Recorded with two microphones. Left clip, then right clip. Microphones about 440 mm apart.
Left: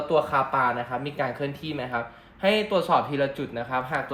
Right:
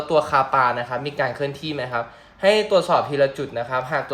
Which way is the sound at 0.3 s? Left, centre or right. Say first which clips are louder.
Right 5 dB; right.